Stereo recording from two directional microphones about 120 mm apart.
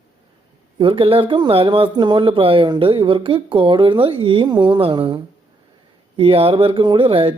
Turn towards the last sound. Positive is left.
turn(degrees=-50)  # may be behind; listen again after turning